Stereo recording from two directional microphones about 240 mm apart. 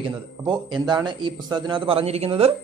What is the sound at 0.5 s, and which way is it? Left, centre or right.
Speech, centre.